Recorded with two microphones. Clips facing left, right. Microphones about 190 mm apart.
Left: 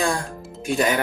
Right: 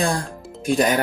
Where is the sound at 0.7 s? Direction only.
40° right (ahead or behind).